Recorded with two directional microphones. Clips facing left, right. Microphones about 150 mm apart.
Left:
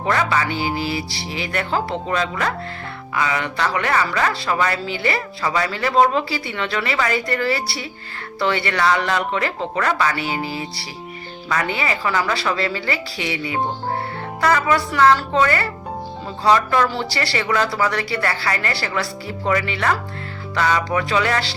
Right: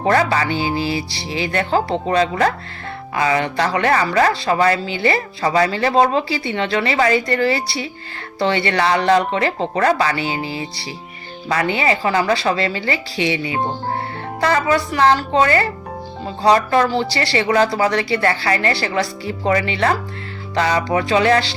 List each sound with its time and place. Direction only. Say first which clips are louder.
0.1 s speech: right 3 dB; 40° right (ahead or behind)
5.4 s speech: right 6 dB; 40° right (ahead or behind)
16.9 s speech: right 4 dB; 20° right (ahead or behind)